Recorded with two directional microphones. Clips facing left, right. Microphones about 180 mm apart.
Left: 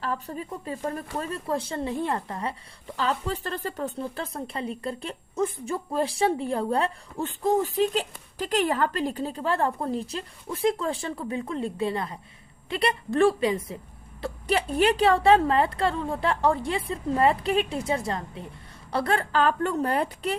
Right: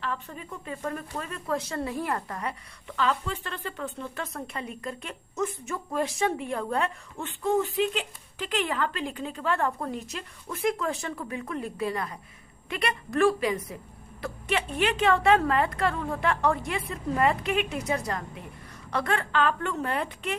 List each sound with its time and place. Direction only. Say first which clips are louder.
0.0 s a woman's voice: left 4 dB; 35° left (ahead or behind)